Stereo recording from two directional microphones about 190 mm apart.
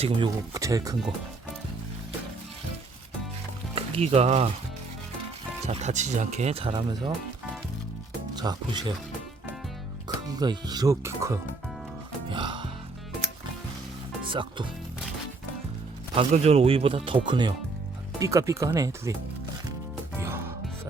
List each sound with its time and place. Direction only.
0.0 s speech: 20° right (ahead or behind)
3.8 s speech: 30° right (ahead or behind)
5.6 s speech: 35° right (ahead or behind)
8.4 s speech: 20° right (ahead or behind)
10.2 s speech: 20° right (ahead or behind)
12.3 s music: 25° right (ahead or behind)
14.3 s speech: 25° right (ahead or behind)
16.1 s speech: 30° right (ahead or behind); by 19.1 s 15° right (ahead or behind)
20.1 s music: 15° right (ahead or behind)